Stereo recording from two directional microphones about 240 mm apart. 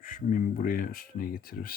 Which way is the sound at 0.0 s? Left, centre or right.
Left.